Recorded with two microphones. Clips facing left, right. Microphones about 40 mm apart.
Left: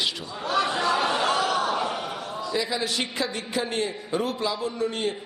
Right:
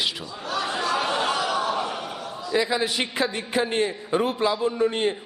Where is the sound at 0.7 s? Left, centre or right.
Centre.